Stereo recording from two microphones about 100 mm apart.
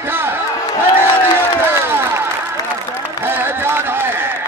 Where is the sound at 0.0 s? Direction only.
20° right (ahead or behind).